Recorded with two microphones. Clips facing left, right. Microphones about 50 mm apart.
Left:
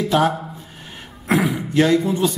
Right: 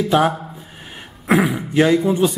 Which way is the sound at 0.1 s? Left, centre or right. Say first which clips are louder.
Right 1 dB; centre.